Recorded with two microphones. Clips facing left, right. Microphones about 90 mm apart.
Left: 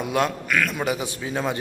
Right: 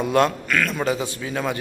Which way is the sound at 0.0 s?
5° left (ahead or behind).